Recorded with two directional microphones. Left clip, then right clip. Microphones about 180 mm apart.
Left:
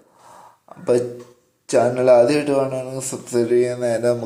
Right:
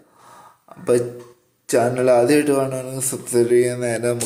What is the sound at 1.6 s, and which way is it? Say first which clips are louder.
Speech: left 2 dB; 10° right (ahead or behind).